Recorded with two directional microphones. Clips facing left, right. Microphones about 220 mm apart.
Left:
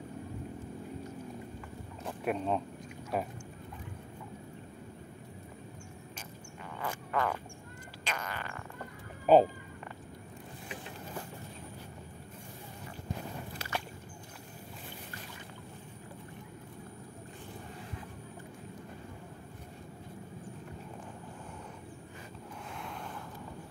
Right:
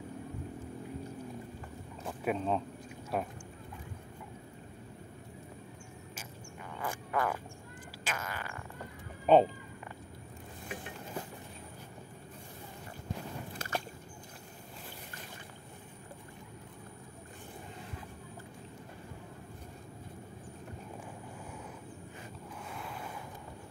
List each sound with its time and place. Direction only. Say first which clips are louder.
2.0 s fart: even; centre (ahead or behind)
6.8 s frog: even; 5° right (ahead or behind)
8.0 s fart: even; 5° right (ahead or behind)
9.2 s speech: left 1 dB; 5° left (ahead or behind)
13.6 s a sound: right 1 dB; 45° right (ahead or behind)
22.8 s vehicle: even; 5° right (ahead or behind)